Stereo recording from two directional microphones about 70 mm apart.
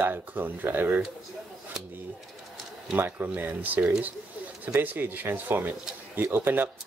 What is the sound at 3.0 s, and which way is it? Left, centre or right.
Speech, right.